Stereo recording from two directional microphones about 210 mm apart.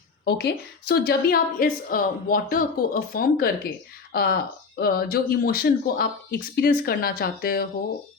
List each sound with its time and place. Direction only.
0.3 s a woman's voice: 50° left (ahead or behind)